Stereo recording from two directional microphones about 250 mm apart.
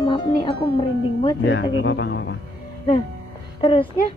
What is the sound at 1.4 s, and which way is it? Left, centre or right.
Speech, left.